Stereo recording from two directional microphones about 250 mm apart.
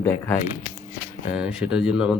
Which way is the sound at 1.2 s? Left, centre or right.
Centre.